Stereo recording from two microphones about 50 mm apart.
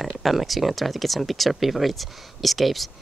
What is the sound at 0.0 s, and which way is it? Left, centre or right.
Speech, centre.